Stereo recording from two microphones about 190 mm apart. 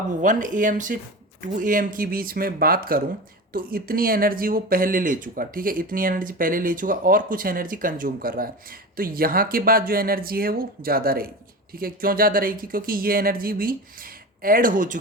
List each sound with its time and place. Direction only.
0.2 s speech: 45° right (ahead or behind)